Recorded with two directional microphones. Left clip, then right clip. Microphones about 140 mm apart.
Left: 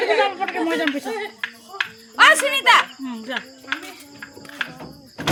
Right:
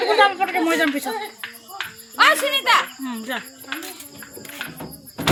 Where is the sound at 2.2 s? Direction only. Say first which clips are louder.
Left 2 dB; 10° left (ahead or behind).